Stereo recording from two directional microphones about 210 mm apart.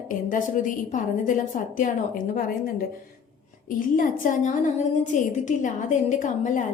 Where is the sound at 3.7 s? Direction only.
40° left (ahead or behind).